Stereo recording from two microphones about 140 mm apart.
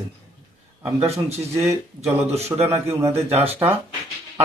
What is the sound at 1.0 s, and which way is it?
Speech, 45° right (ahead or behind).